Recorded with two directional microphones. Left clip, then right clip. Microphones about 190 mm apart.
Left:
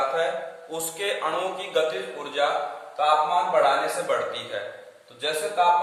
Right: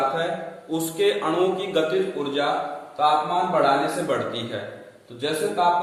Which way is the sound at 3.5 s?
Centre (ahead or behind).